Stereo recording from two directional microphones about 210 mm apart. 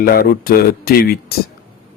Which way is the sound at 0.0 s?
45° left (ahead or behind).